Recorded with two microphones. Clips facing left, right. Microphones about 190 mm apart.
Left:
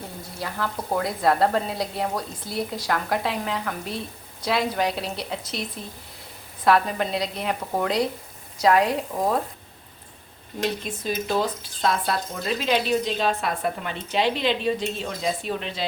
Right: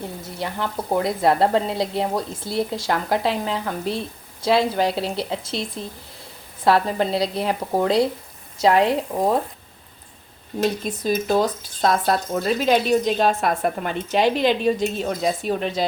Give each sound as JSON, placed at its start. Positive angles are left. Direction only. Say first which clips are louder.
{"t": 0.3, "sound": "a woman's voice", "louder": "right 2 dB", "side_deg": -25}
{"t": 10.6, "sound": "speech", "louder": "right 5 dB", "side_deg": -40}